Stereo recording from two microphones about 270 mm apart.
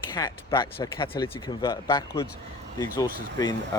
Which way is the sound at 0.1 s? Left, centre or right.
Centre.